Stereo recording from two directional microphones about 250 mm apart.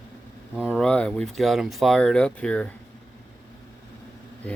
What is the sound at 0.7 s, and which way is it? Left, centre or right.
Speech, centre.